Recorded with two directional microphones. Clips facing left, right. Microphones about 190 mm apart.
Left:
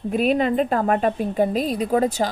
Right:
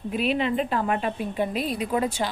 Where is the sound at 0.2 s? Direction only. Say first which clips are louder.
Left 5 dB; 45° left (ahead or behind).